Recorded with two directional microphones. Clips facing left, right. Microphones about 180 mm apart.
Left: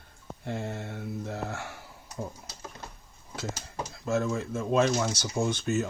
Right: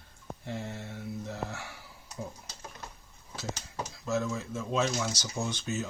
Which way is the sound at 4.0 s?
55° left (ahead or behind).